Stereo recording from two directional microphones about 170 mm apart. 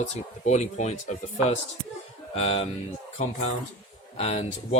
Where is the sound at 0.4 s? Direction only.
45° left (ahead or behind).